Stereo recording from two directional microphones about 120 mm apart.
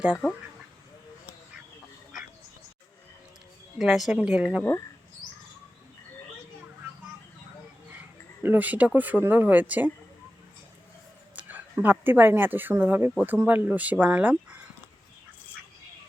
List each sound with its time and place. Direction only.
3.8 s a woman's voice: centre (ahead or behind)
8.4 s speech: 15° right (ahead or behind)
11.3 s speech: 15° right (ahead or behind)